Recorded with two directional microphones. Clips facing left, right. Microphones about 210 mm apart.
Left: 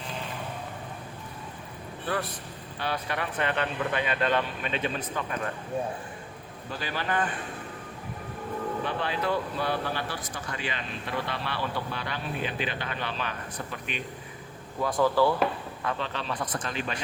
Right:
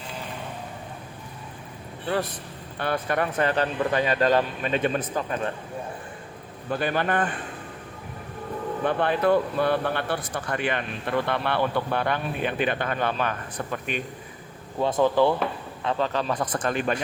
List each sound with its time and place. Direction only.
2.7 s speech: 50° right (ahead or behind)
6.7 s speech: 55° right (ahead or behind)
8.8 s speech: 55° right (ahead or behind)
14.8 s speech: 25° right (ahead or behind)
16.0 s speech: 40° right (ahead or behind)